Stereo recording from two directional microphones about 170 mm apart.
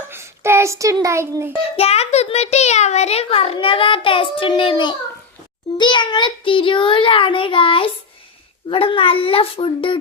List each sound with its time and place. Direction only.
0.1 s a child's voice: 15° right (ahead or behind)
1.7 s a child's voice: 35° left (ahead or behind)